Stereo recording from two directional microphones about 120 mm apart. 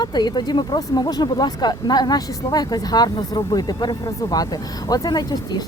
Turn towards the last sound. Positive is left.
turn(degrees=35)  # may be behind; listen again after turning